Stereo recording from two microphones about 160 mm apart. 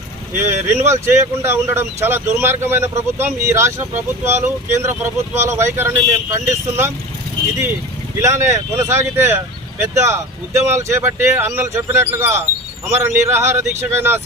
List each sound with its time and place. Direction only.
0.3 s speech: 15° right (ahead or behind)
8.2 s speech: 20° right (ahead or behind)